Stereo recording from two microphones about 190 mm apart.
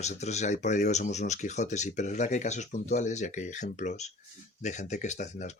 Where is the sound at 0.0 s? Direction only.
35° left (ahead or behind).